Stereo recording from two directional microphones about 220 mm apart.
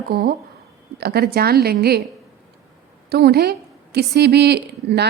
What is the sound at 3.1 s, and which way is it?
A woman's voice, 45° right (ahead or behind).